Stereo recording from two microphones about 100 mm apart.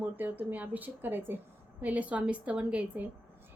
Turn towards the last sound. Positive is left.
turn(degrees=-15)  # may be behind; listen again after turning